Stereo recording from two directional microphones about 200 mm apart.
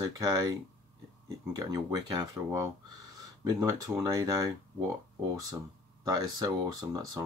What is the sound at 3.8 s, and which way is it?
Speech, 20° right (ahead or behind).